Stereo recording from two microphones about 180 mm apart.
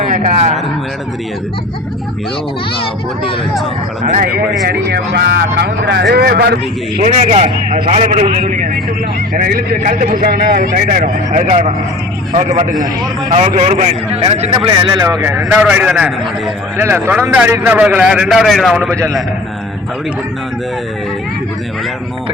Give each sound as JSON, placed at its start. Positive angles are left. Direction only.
{"t": 0.1, "sound": "speech", "side_deg": -40}
{"t": 4.0, "sound": "speech", "side_deg": -40}
{"t": 4.6, "sound": "speech", "side_deg": -65}
{"t": 7.0, "sound": "a man's voice", "side_deg": -40}